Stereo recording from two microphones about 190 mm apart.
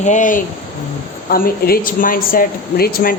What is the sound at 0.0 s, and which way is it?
Speech, 40° left (ahead or behind).